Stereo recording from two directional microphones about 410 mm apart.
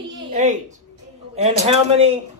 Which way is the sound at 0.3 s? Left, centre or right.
Centre.